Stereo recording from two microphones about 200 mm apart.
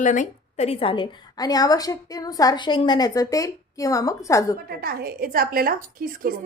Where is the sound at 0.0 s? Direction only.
40° left (ahead or behind); by 4.4 s 15° left (ahead or behind).